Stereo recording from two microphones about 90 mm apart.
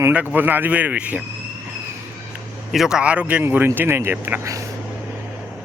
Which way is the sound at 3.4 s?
25° right (ahead or behind).